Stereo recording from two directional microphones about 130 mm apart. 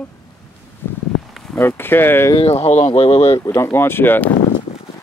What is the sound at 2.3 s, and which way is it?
Speech, 50° left (ahead or behind).